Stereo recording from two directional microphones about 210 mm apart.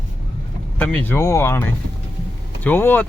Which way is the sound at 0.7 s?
10° left (ahead or behind).